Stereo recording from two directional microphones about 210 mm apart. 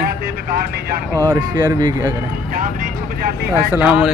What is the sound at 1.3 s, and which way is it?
Speech, 20° right (ahead or behind).